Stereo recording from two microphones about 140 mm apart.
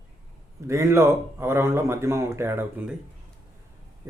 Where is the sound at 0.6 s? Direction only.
20° right (ahead or behind).